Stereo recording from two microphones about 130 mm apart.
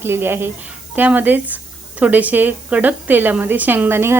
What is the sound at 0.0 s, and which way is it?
A woman's voice, 15° right (ahead or behind).